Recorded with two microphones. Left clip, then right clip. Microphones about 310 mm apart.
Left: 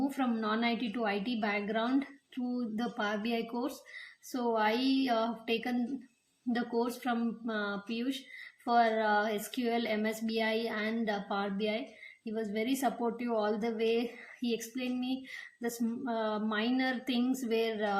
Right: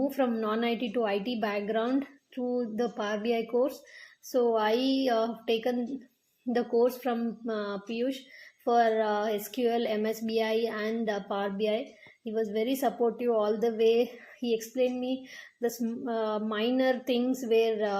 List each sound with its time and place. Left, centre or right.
0.3 s a woman's voice: centre